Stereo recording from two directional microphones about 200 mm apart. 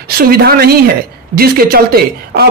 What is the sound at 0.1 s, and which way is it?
Speech, 50° right (ahead or behind).